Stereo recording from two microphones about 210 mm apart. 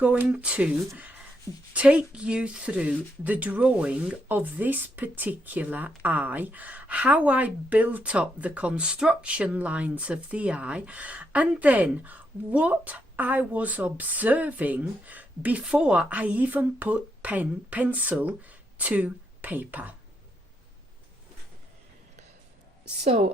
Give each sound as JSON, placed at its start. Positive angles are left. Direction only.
{"t": 0.0, "sound": "speech", "side_deg": -5}